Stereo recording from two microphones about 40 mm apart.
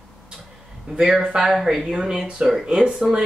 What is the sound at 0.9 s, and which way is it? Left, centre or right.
Speech, right.